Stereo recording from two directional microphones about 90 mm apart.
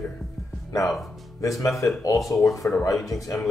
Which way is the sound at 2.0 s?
35° left (ahead or behind).